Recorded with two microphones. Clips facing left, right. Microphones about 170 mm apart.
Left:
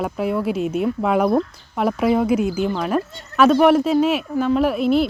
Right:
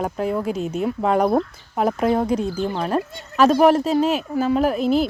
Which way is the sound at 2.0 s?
5° left (ahead or behind).